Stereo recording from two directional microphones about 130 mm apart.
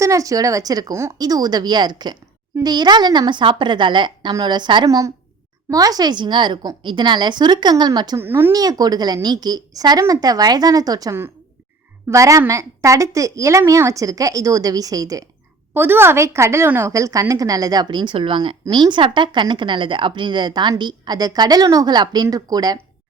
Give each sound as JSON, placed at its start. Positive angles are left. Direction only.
{"t": 0.0, "sound": "a woman's voice", "side_deg": -25}
{"t": 8.2, "sound": "speech", "side_deg": -15}
{"t": 8.5, "sound": "a woman's voice", "side_deg": -30}
{"t": 15.7, "sound": "a woman's voice", "side_deg": -15}